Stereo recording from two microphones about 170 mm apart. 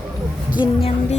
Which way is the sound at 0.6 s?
35° left (ahead or behind).